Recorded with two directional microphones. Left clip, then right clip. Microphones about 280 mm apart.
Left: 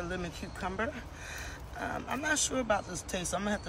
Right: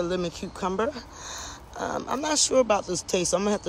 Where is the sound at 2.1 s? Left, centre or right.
Centre.